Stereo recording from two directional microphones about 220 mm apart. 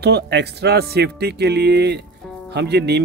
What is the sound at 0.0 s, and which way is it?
Speech, 50° right (ahead or behind).